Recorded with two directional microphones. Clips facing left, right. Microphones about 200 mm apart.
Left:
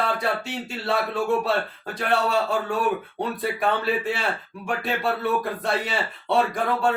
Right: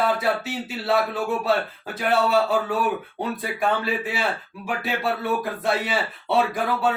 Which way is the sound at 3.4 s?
Centre (ahead or behind).